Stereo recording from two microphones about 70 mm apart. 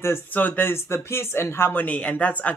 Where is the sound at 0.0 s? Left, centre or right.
Left.